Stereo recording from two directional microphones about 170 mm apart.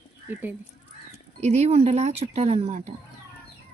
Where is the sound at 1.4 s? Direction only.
40° right (ahead or behind).